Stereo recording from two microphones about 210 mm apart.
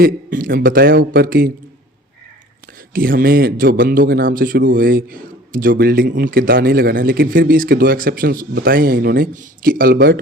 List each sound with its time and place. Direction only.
0.0 s a man's voice: 40° right (ahead or behind)
2.9 s a man's voice: 45° right (ahead or behind)